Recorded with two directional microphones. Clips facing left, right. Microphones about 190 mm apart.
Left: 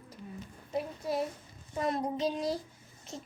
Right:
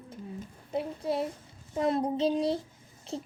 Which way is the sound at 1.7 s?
30° right (ahead or behind).